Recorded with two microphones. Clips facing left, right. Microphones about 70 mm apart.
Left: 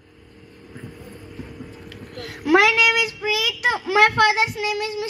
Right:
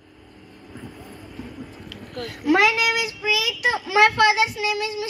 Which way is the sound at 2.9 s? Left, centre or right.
Left.